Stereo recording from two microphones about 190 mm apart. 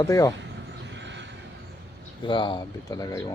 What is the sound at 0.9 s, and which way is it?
Vehicle, 70° right (ahead or behind).